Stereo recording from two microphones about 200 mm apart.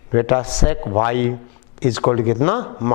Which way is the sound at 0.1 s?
15° left (ahead or behind).